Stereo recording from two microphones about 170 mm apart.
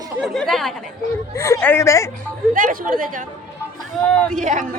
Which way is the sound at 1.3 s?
15° left (ahead or behind).